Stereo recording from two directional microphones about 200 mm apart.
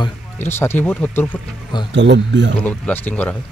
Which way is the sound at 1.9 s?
60° right (ahead or behind).